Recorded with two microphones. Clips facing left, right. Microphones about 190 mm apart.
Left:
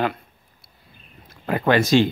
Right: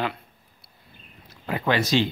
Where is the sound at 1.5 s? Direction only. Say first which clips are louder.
Left 5 dB; 50° left (ahead or behind).